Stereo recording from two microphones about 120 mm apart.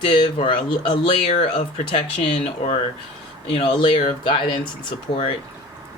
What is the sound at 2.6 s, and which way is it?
Speech, 65° left (ahead or behind).